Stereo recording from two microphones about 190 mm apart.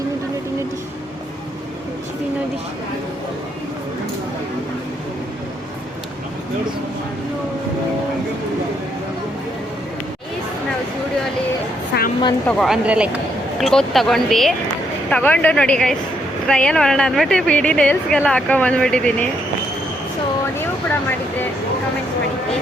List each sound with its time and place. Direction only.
11.9 s vehicle: 60° left (ahead or behind)
12.5 s speech: centre (ahead or behind)